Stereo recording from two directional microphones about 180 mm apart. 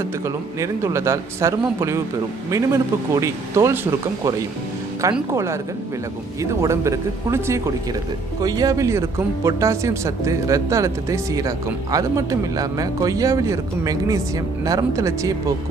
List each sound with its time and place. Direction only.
0.6 s a man's voice: 15° right (ahead or behind)